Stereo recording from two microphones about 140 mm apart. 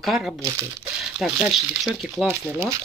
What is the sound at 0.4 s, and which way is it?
Speech, 20° right (ahead or behind).